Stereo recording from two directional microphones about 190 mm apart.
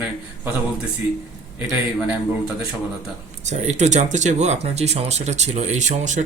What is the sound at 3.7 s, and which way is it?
Speech, 35° right (ahead or behind).